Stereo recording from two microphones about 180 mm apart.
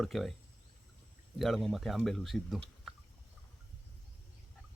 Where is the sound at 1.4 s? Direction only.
Centre (ahead or behind).